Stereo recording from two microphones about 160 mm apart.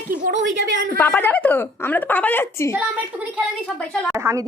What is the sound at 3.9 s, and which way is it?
Speech, 10° left (ahead or behind).